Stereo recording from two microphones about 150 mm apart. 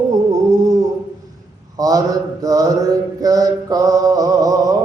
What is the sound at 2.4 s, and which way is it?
Mantra, 25° right (ahead or behind).